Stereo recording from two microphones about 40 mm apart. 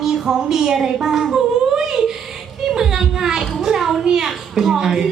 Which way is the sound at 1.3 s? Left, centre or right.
Centre.